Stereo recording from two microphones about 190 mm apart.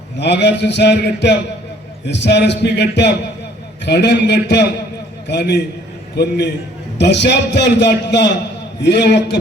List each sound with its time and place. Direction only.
0.2 s a man's voice: 65° left (ahead or behind)